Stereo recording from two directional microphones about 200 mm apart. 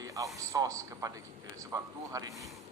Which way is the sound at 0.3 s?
15° right (ahead or behind).